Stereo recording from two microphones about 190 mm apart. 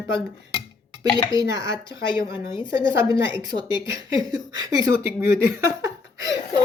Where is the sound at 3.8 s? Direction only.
15° right (ahead or behind).